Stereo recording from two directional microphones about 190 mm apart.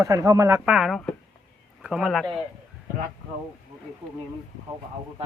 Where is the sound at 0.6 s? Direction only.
5° right (ahead or behind).